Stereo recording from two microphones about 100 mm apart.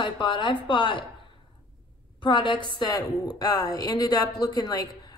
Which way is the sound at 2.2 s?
50° left (ahead or behind).